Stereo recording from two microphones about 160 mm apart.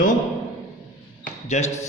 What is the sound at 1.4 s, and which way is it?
Speech, 45° left (ahead or behind).